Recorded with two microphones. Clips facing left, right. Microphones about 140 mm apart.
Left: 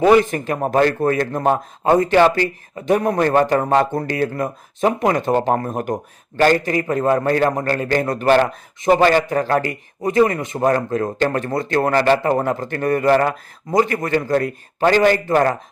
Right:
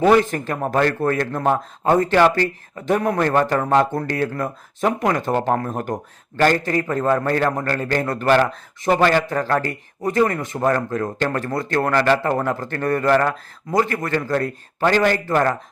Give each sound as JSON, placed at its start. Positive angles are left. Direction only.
{"t": 0.0, "sound": "speech", "side_deg": 15}